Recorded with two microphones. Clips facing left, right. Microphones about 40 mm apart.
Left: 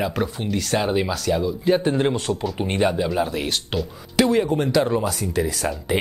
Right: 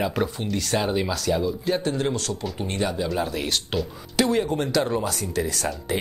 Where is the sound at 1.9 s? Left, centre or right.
Left.